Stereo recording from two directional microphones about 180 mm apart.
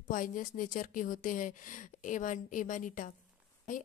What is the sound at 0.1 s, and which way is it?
A woman's voice, 50° left (ahead or behind).